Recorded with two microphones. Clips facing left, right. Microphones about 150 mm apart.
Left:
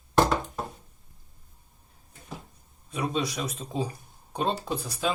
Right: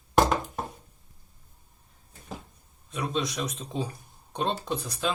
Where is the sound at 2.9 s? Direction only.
5° left (ahead or behind).